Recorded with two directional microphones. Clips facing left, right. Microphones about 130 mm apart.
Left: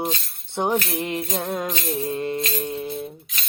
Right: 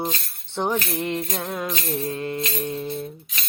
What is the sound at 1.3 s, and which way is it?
Music, 25° left (ahead or behind).